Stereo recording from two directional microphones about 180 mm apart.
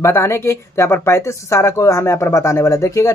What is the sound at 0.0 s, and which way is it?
Speech, 15° left (ahead or behind).